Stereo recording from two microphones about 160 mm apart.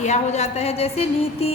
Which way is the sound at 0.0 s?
45° left (ahead or behind).